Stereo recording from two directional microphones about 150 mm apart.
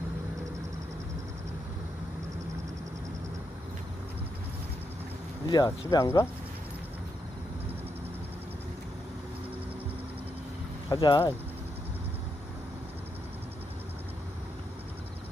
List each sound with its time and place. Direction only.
5.5 s speech: 25° left (ahead or behind)
10.9 s speech: 25° left (ahead or behind)